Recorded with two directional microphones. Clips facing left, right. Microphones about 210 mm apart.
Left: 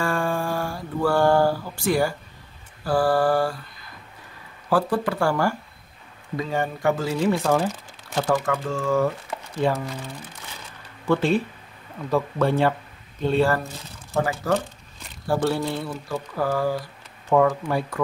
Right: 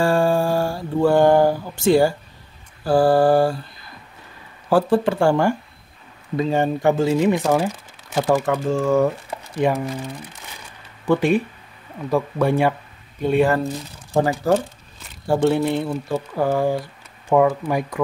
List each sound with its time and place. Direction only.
0.0 s mantra: 30° right (ahead or behind)
2.9 s speech: 25° right (ahead or behind)
4.6 s speech: 25° right (ahead or behind)
11.1 s speech: 15° right (ahead or behind)
15.2 s speech: 20° right (ahead or behind)